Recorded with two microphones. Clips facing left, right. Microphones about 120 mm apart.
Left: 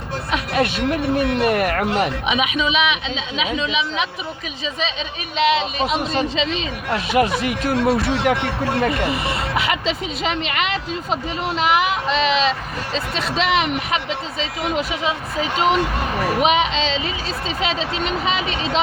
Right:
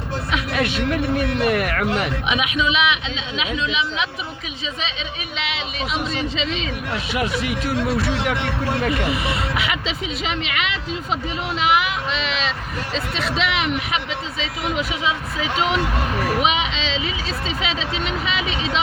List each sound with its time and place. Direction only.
0.3 s music: 40° left (ahead or behind)
0.9 s speech: 35° left (ahead or behind)
5.4 s speech: 40° left (ahead or behind)